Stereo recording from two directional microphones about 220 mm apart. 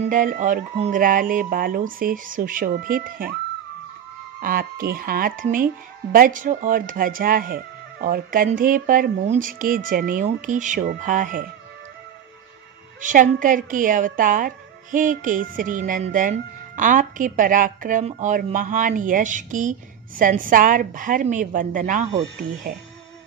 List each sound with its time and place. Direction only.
0.0 s a woman's voice: 35° right (ahead or behind)
4.4 s a woman's voice: 40° right (ahead or behind)
13.0 s a woman's voice: 35° right (ahead or behind)